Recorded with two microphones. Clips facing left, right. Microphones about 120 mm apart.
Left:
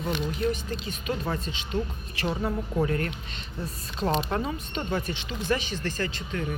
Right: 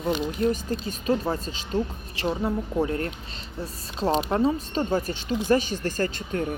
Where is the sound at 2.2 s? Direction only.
25° right (ahead or behind).